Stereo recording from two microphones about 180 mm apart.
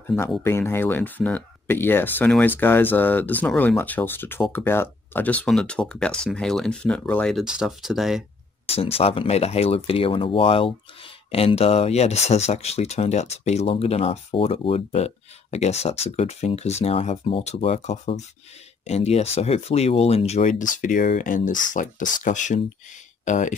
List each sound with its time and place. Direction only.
0.4 s speech: 15° left (ahead or behind)
8.6 s speech: 35° left (ahead or behind)